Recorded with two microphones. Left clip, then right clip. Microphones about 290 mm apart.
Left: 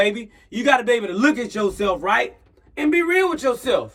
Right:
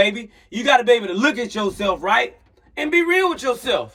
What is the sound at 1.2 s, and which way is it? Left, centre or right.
Speech, right.